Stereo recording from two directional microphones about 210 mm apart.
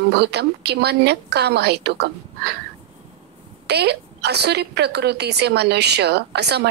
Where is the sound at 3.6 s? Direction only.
50° right (ahead or behind).